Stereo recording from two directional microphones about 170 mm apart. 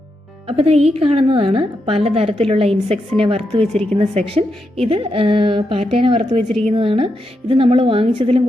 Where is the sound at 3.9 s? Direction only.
35° right (ahead or behind).